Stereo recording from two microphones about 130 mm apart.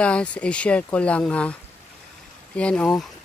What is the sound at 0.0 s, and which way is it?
Speech, 10° left (ahead or behind).